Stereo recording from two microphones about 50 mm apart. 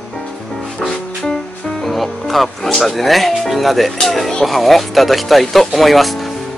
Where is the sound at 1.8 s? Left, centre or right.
Centre.